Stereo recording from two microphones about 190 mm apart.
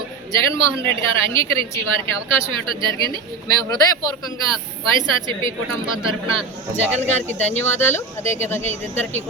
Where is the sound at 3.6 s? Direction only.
20° left (ahead or behind).